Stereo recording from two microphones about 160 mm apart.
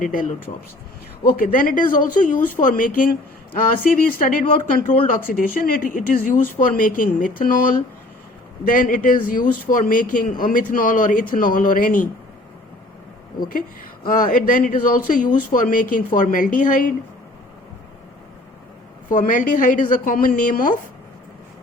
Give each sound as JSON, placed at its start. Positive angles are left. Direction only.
{"t": 0.0, "sound": "speech", "side_deg": 55}
{"t": 14.1, "sound": "speech", "side_deg": 60}
{"t": 19.1, "sound": "speech", "side_deg": 55}